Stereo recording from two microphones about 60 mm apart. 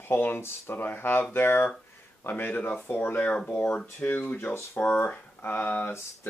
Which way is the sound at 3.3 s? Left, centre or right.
Centre.